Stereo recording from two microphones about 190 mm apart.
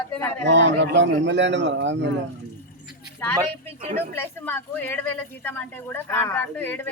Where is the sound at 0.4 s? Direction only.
70° right (ahead or behind).